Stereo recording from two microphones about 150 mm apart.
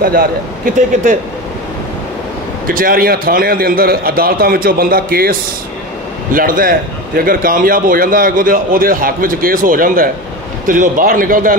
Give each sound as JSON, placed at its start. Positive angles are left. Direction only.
{"t": 0.0, "sound": "a man's voice", "side_deg": -80}
{"t": 2.7, "sound": "a man's voice", "side_deg": -70}
{"t": 6.3, "sound": "a man's voice", "side_deg": -70}